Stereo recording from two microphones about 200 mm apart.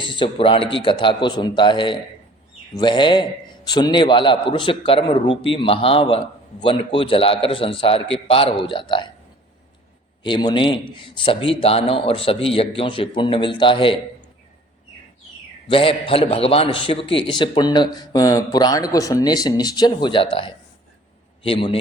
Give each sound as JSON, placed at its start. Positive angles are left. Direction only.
{"t": 0.0, "sound": "a man's voice", "side_deg": 25}
{"t": 10.2, "sound": "a man's voice", "side_deg": 20}
{"t": 15.6, "sound": "a man's voice", "side_deg": 25}